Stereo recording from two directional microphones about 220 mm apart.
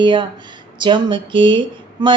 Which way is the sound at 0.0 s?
20° right (ahead or behind).